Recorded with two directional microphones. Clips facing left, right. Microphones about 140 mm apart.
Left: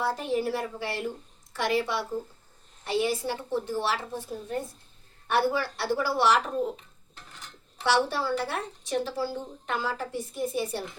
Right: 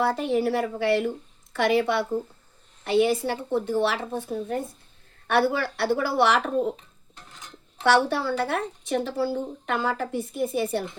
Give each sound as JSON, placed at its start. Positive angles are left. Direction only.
{"t": 0.0, "sound": "speech", "side_deg": -65}
{"t": 7.9, "sound": "speech", "side_deg": -55}